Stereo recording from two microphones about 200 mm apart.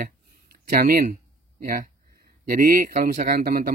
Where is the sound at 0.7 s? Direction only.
45° right (ahead or behind).